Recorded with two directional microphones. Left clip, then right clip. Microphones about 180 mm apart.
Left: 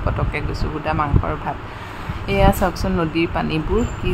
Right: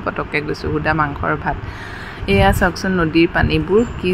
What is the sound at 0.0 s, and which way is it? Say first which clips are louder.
Speech: right 4 dB; 20° right (ahead or behind).